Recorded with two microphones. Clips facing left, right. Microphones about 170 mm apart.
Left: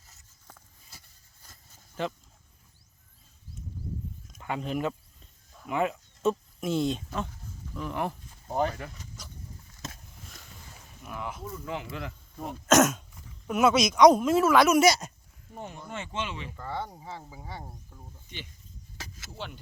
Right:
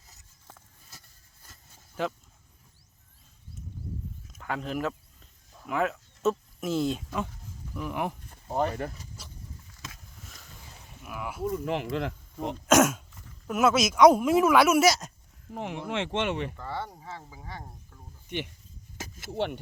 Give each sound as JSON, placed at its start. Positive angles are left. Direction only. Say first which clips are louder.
{"t": 2.0, "sound": "throat clearing", "louder": "right 1 dB", "side_deg": -10}
{"t": 4.3, "sound": "speech", "louder": "left 1 dB", "side_deg": 0}
{"t": 7.8, "sound": "throat clearing", "louder": "even", "side_deg": -10}
{"t": 8.4, "sound": "speech", "louder": "even", "side_deg": 0}
{"t": 10.2, "sound": "boat", "louder": "left 1 dB", "side_deg": 0}
{"t": 11.0, "sound": "speech", "louder": "right 1 dB", "side_deg": -5}
{"t": 11.5, "sound": "speech", "louder": "right 7 dB", "side_deg": -65}
{"t": 12.6, "sound": "throat clearing", "louder": "even", "side_deg": -10}
{"t": 13.5, "sound": "speech", "louder": "left 1 dB", "side_deg": 0}
{"t": 15.5, "sound": "speech", "louder": "right 7 dB", "side_deg": -90}
{"t": 16.6, "sound": "sizzle", "louder": "even", "side_deg": 15}
{"t": 18.3, "sound": "speech", "louder": "right 12 dB", "side_deg": -65}